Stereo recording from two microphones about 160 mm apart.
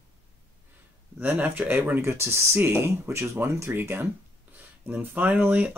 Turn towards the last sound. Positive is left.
turn(degrees=-10)  # may be behind; listen again after turning